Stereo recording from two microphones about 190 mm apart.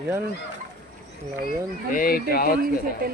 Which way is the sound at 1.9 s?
50° left (ahead or behind).